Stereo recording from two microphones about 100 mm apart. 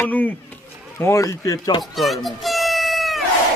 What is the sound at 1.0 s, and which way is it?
Speech, 30° left (ahead or behind).